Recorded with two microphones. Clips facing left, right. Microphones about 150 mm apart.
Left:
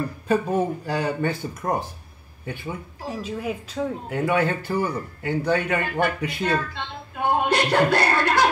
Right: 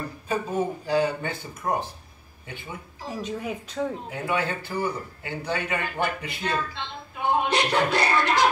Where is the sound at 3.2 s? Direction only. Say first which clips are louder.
Left 1 dB; 5° left (ahead or behind).